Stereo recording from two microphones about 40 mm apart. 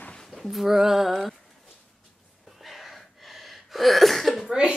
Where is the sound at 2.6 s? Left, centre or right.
Centre.